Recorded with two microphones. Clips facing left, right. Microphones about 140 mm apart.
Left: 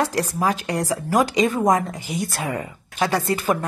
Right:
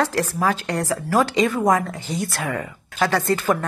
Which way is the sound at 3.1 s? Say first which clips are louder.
Right 1 dB; 15° left (ahead or behind).